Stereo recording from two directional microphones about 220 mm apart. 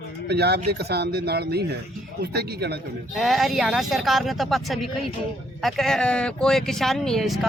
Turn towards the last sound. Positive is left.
turn(degrees=0)  # may be behind; listen again after turning